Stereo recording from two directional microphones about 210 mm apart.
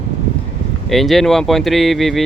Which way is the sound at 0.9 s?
Centre (ahead or behind).